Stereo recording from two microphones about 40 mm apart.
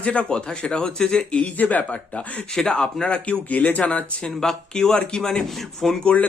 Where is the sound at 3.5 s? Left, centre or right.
Left.